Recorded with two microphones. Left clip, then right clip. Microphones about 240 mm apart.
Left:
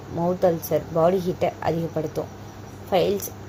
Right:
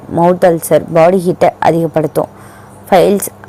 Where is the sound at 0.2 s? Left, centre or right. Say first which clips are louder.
Right 13 dB; right.